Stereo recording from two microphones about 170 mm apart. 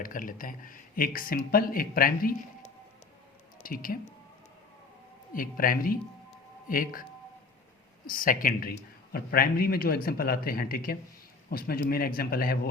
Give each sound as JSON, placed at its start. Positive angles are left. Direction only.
{"t": 0.0, "sound": "speech", "side_deg": 55}
{"t": 3.6, "sound": "speech", "side_deg": 60}
{"t": 5.3, "sound": "speech", "side_deg": 55}
{"t": 8.0, "sound": "speech", "side_deg": 55}